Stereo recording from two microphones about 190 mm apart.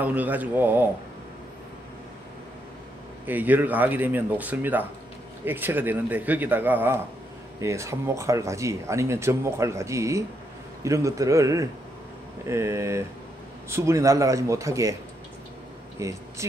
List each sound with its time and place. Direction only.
0.0 s speech: 10° right (ahead or behind)
3.3 s speech: 10° right (ahead or behind)
16.0 s speech: 15° right (ahead or behind)